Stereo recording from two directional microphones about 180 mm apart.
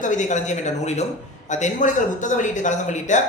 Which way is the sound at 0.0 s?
45° left (ahead or behind).